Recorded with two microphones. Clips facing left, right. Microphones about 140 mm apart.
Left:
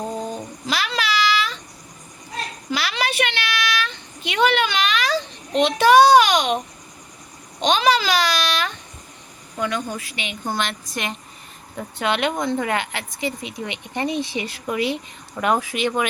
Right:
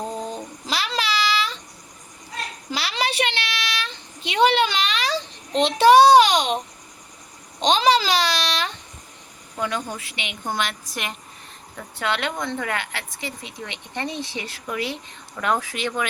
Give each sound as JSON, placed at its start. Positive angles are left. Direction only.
{"t": 0.1, "sound": "babbling", "side_deg": 5}
{"t": 0.7, "sound": "child singing", "side_deg": -30}
{"t": 2.6, "sound": "child singing", "side_deg": -30}
{"t": 5.6, "sound": "a child's voice", "side_deg": -30}
{"t": 7.6, "sound": "a child's voice", "side_deg": -30}
{"t": 10.6, "sound": "a woman's voice", "side_deg": -10}
{"t": 11.9, "sound": "speech", "side_deg": 20}